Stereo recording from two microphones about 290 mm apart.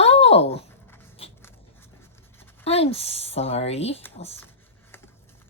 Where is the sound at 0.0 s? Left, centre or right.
Left.